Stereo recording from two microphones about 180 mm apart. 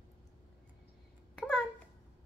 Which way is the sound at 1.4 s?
5° left (ahead or behind).